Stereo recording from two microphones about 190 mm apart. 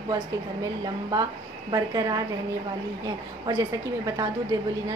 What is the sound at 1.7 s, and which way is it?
Speech, 20° right (ahead or behind).